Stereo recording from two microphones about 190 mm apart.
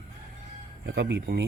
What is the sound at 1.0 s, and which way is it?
Speech, 60° right (ahead or behind).